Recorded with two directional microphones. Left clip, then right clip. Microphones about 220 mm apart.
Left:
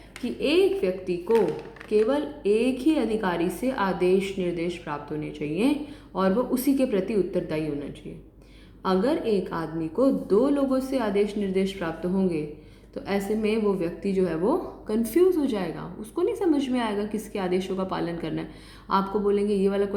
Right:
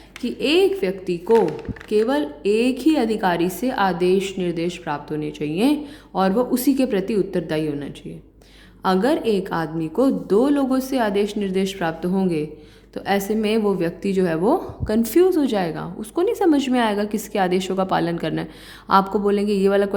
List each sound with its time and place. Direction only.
0.2 s speech: 40° right (ahead or behind)